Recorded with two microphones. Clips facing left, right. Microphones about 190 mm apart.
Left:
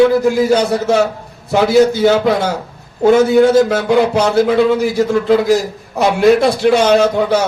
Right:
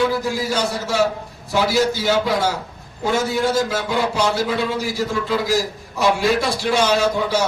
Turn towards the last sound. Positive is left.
turn(degrees=60)  # may be behind; listen again after turning